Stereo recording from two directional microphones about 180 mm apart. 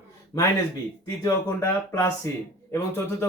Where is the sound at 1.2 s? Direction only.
15° left (ahead or behind).